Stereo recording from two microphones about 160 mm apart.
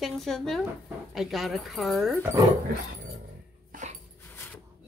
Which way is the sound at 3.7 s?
55° right (ahead or behind).